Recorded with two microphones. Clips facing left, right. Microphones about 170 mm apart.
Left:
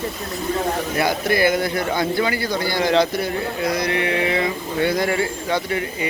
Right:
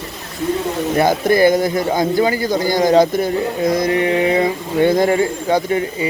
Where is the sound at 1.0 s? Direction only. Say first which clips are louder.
Right 7 dB; 45° right (ahead or behind).